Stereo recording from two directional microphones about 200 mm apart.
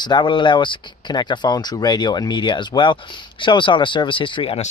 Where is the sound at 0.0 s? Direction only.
20° left (ahead or behind).